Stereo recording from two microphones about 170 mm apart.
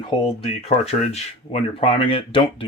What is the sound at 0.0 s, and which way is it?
Speech, 30° left (ahead or behind).